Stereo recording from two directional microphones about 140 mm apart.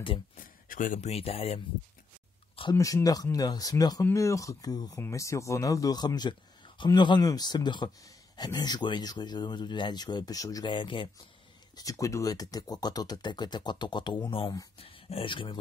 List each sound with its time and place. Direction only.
0.4 s speech: 75° left (ahead or behind)
1.1 s speech: 45° left (ahead or behind)
2.7 s speech: 25° left (ahead or behind)
11.7 s speech: 25° left (ahead or behind)